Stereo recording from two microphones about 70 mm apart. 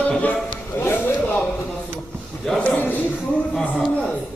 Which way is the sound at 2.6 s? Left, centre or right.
Left.